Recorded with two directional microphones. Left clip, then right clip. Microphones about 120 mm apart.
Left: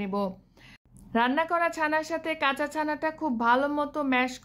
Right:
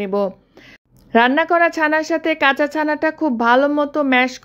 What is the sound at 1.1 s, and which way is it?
Speech, 40° right (ahead or behind).